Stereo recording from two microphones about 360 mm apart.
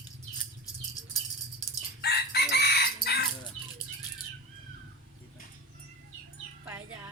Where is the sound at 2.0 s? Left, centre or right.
Left.